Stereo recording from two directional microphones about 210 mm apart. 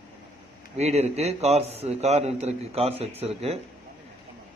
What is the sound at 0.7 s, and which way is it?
A man's voice, 30° right (ahead or behind).